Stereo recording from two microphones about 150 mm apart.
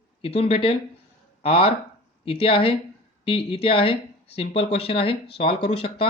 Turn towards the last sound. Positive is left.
turn(degrees=40)  # may be behind; listen again after turning